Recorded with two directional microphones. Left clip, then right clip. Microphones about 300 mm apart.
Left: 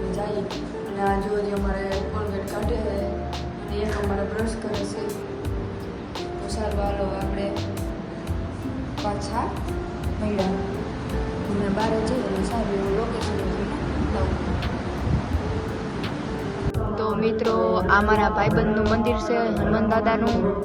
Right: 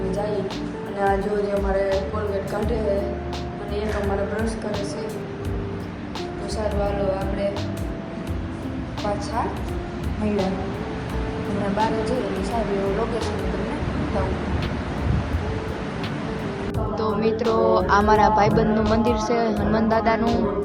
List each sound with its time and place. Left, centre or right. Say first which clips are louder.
1.5 s speech: right 5 dB; centre
11.8 s speech: right 2 dB; centre
17.0 s music: right 1 dB; centre
17.6 s speech: right 2 dB; centre
18.8 s speech: right 2 dB; centre